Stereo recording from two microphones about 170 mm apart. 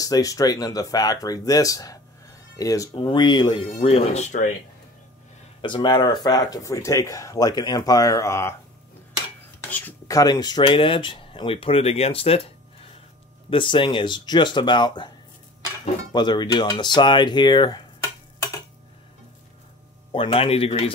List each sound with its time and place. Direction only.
0.0 s speech: 20° left (ahead or behind); by 4.5 s 45° left (ahead or behind)
5.6 s speech: 30° left (ahead or behind)
9.7 s speech: 10° left (ahead or behind); by 12.4 s 35° left (ahead or behind)
13.5 s speech: 30° left (ahead or behind)
20.1 s speech: 30° left (ahead or behind)